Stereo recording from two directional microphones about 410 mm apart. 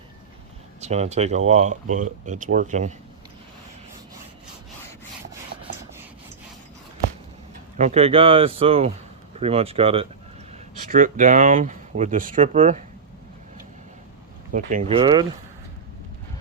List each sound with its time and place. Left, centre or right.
0.8 s speech: centre
7.8 s speech: centre
14.5 s speech: centre